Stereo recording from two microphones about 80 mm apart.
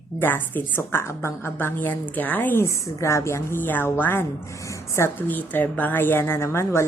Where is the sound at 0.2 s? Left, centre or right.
Left.